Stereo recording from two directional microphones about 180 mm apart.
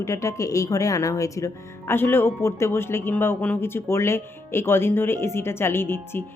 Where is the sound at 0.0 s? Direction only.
15° left (ahead or behind).